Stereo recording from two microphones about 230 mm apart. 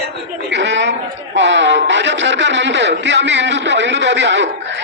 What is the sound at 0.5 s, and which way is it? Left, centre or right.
Chatter, right.